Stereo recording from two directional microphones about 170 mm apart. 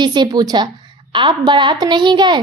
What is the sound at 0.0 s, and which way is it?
A woman's voice, 25° right (ahead or behind).